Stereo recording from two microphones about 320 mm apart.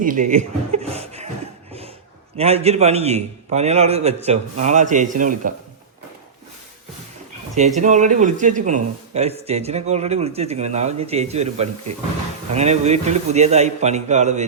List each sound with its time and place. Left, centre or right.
0.0 s chuckle: right
2.4 s a man's voice: centre
7.8 s a man's voice: right